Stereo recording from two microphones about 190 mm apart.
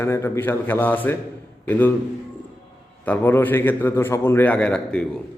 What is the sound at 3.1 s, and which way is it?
A man's voice, 10° left (ahead or behind).